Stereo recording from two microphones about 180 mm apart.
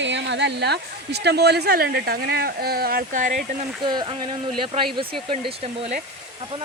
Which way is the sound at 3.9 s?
25° right (ahead or behind).